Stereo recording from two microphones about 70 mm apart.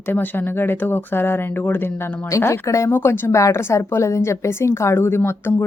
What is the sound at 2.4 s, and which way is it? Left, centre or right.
A woman's voice, left.